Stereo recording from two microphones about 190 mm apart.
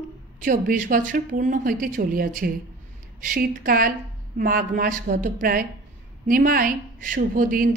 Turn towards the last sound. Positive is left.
turn(degrees=-45)  # may be behind; listen again after turning